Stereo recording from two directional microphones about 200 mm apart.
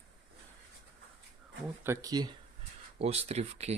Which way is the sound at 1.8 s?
15° right (ahead or behind).